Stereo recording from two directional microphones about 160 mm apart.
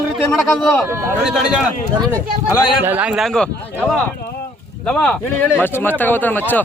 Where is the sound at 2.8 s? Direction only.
10° right (ahead or behind).